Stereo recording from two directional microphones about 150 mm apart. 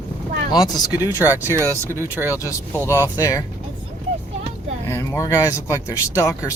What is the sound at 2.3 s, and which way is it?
Speech, 20° left (ahead or behind).